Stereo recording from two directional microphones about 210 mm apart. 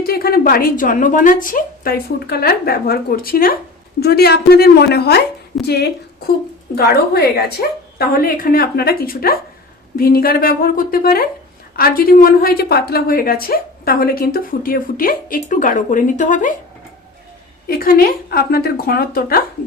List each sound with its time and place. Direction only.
0.0 s a woman's voice: 45° left (ahead or behind)
17.7 s a woman's voice: 45° left (ahead or behind)